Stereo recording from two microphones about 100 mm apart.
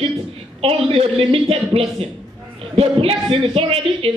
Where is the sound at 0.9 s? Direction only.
75° right (ahead or behind).